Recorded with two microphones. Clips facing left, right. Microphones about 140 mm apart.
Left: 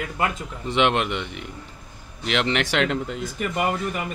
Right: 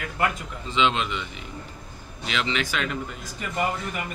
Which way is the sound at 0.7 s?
65° left (ahead or behind).